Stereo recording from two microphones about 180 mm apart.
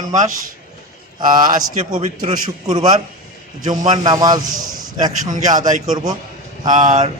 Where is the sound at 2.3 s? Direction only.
25° right (ahead or behind).